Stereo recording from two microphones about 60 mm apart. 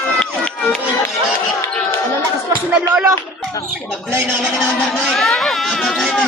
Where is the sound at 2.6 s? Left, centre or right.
Centre.